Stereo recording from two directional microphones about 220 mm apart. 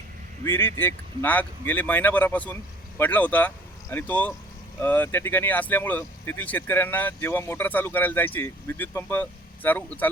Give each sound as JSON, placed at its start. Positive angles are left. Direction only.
{"t": 0.4, "sound": "speech", "side_deg": 10}